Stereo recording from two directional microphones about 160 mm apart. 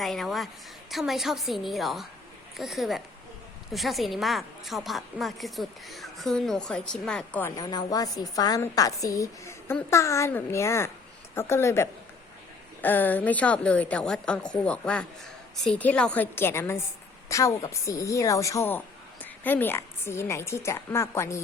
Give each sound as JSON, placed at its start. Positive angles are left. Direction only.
{"t": 0.0, "sound": "a woman's voice", "side_deg": 0}
{"t": 7.5, "sound": "a woman's voice", "side_deg": 25}